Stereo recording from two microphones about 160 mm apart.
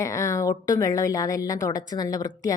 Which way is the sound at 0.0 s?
20° left (ahead or behind).